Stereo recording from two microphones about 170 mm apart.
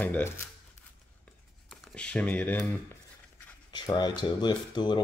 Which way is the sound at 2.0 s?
5° left (ahead or behind).